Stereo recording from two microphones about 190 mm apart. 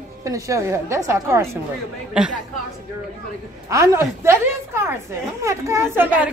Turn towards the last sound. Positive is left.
turn(degrees=-10)  # may be behind; listen again after turning